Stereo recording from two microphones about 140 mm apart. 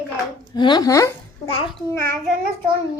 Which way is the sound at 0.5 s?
30° left (ahead or behind).